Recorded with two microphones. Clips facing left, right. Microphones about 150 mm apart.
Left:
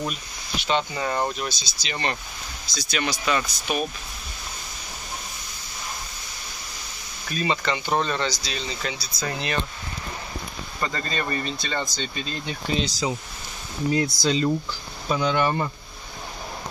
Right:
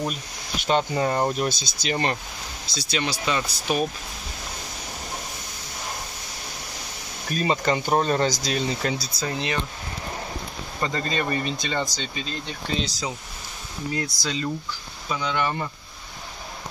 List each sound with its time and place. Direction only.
0.7 s speech: 45° right (ahead or behind)
1.4 s speech: 55° right (ahead or behind)
2.6 s speech: 30° right (ahead or behind)
7.2 s speech: 45° right (ahead or behind)
9.2 s speech: 20° right (ahead or behind)
10.8 s speech: 20° right (ahead or behind)
12.0 s speech: 5° right (ahead or behind)
14.0 s speech: 25° left (ahead or behind)
15.0 s speech: 40° left (ahead or behind)